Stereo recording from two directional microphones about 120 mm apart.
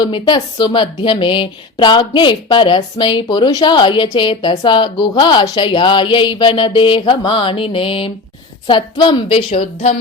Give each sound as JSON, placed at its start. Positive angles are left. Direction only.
{"t": 0.0, "sound": "a woman's voice", "side_deg": 40}